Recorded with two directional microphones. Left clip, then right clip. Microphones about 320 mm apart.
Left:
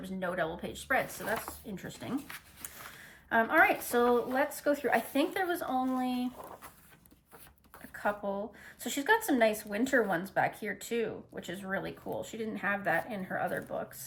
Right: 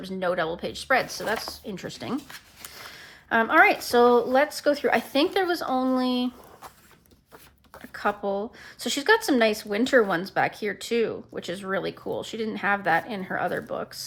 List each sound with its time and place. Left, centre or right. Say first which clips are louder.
0.0 s speech: right 8 dB; centre
3.2 s speech: right 7 dB; centre
8.8 s speech: right 7 dB; centre